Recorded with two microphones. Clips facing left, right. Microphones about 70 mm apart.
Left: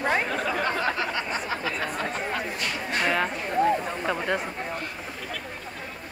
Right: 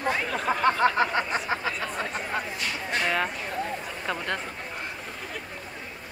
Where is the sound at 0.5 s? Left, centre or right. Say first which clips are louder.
Right 8 dB; right.